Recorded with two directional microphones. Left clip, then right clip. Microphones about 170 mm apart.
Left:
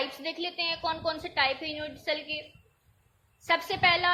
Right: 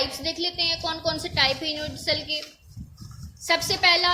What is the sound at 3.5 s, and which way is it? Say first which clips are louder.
Speech: right 4 dB; 15° right (ahead or behind).